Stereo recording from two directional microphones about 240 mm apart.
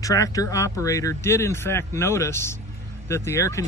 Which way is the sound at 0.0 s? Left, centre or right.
Centre.